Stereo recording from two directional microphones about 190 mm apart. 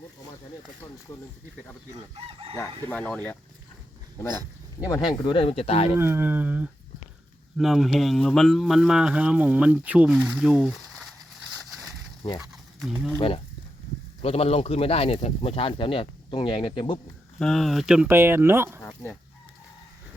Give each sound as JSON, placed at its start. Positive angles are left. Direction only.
{"t": 2.1, "sound": "chicken", "side_deg": -30}
{"t": 2.6, "sound": "speech", "side_deg": 10}
{"t": 4.8, "sound": "speech", "side_deg": 20}
{"t": 6.0, "sound": "speech", "side_deg": -10}
{"t": 12.4, "sound": "speech", "side_deg": -5}
{"t": 13.1, "sound": "speech", "side_deg": 30}
{"t": 17.4, "sound": "speech", "side_deg": 0}
{"t": 18.8, "sound": "speech", "side_deg": 15}